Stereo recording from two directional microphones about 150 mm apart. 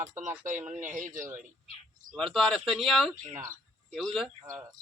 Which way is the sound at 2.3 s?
Centre (ahead or behind).